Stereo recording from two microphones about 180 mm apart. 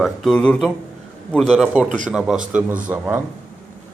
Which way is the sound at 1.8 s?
45° right (ahead or behind).